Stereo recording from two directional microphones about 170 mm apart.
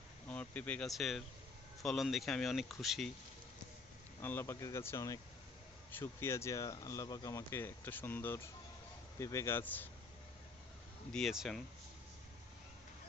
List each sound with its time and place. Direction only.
0.3 s speech: 10° left (ahead or behind)
4.2 s speech: 10° left (ahead or behind)
11.1 s speech: centre (ahead or behind)